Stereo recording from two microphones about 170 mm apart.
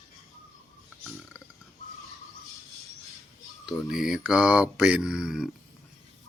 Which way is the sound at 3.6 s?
Centre (ahead or behind).